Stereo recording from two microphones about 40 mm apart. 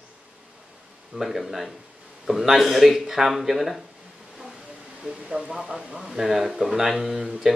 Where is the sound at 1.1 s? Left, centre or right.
Centre.